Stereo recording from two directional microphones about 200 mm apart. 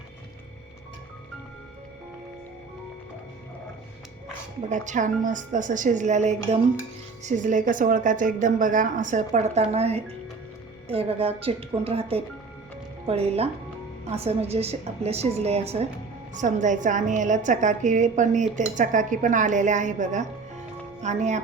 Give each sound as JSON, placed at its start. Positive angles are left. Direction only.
{"t": 4.7, "sound": "a woman's voice", "side_deg": -40}